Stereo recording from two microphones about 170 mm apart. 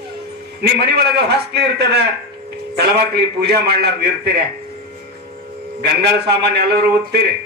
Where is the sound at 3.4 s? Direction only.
75° right (ahead or behind).